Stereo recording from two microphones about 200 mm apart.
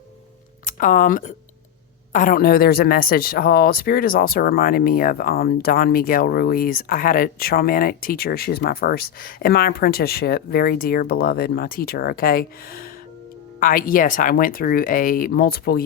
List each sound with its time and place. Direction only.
0.6 s speech: 40° left (ahead or behind)